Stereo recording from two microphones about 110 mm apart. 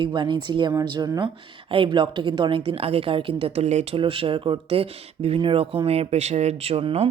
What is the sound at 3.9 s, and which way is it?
Speech, 55° right (ahead or behind).